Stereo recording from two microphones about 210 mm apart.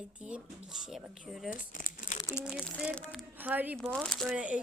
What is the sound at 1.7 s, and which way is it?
Crumpling, 40° left (ahead or behind).